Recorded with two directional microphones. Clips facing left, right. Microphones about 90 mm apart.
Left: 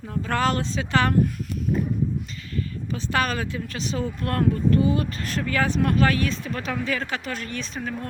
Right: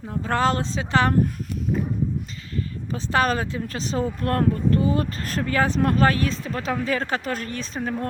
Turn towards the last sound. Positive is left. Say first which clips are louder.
# right 3 dB
turn(degrees=-35)  # may be behind; listen again after turning